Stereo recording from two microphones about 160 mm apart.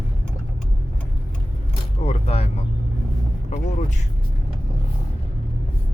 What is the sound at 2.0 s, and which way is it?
Speech, 40° left (ahead or behind).